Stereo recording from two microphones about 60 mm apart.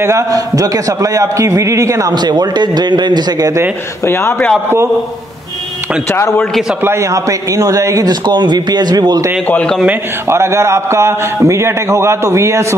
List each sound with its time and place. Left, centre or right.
0.3 s a man's voice: right
6.8 s a man's voice: right
7.2 s a man's voice: right
10.3 s a man's voice: right